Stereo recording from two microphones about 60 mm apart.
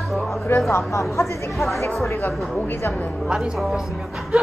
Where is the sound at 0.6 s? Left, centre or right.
Left.